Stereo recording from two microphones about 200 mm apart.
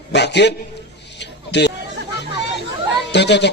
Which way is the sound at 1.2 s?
60° left (ahead or behind).